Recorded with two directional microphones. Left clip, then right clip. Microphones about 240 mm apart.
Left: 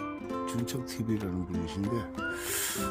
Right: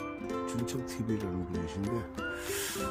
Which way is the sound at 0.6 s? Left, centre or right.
Left.